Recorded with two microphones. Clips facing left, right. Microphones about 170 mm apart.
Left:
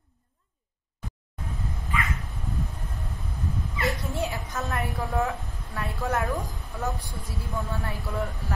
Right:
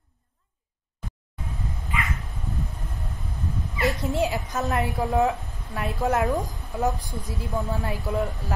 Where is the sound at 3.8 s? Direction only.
20° right (ahead or behind).